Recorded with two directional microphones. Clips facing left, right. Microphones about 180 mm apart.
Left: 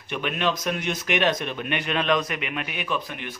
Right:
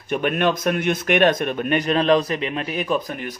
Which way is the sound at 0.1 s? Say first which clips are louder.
Right 6 dB; 50° right (ahead or behind).